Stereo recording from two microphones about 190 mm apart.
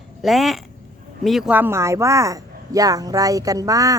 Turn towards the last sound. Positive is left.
turn(degrees=-20)  # may be behind; listen again after turning